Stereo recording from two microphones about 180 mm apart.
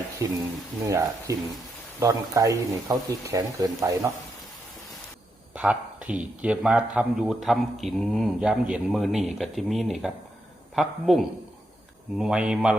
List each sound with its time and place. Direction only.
0.2 s speech: 15° right (ahead or behind)
5.5 s a sound: 5° right (ahead or behind)
6.4 s a man's voice: 5° right (ahead or behind)